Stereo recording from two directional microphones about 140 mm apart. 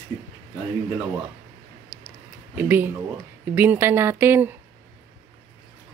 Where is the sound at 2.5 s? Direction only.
15° right (ahead or behind).